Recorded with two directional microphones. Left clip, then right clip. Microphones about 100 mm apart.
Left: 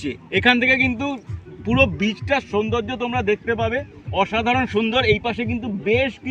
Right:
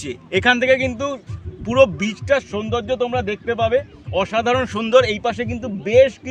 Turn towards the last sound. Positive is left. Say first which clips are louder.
# right 6 dB
turn(degrees=-55)  # may be behind; listen again after turning